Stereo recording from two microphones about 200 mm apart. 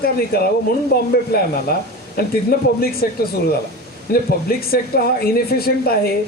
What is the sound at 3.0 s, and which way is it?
Speech, 50° left (ahead or behind).